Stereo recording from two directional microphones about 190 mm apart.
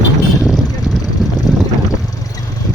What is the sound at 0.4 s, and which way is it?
Vehicle, centre (ahead or behind).